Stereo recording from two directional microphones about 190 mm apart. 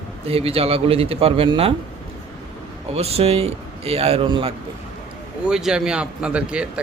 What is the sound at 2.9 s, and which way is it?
Speech, 35° right (ahead or behind).